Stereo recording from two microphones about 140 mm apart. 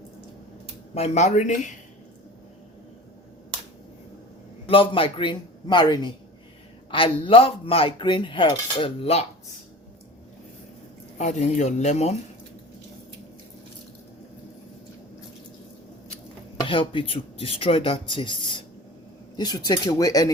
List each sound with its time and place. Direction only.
0.9 s speech: 55° left (ahead or behind)
4.6 s cutlery: 40° left (ahead or behind)
11.2 s speech: 55° left (ahead or behind)
16.6 s cutlery: 40° left (ahead or behind)
19.4 s speech: 30° left (ahead or behind)